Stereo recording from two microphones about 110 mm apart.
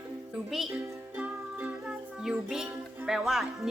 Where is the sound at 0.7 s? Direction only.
15° right (ahead or behind).